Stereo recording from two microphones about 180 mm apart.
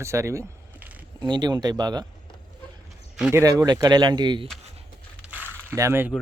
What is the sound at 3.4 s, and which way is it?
Speech, 20° right (ahead or behind).